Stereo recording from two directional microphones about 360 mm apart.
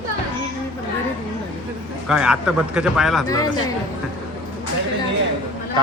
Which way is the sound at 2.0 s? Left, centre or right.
Centre.